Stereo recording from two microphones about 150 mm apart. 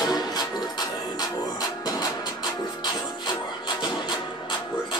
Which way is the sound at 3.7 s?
30° left (ahead or behind).